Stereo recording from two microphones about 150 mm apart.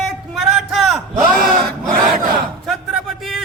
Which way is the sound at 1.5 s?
65° right (ahead or behind).